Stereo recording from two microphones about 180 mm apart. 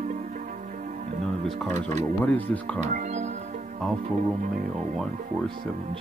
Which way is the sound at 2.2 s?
10° left (ahead or behind).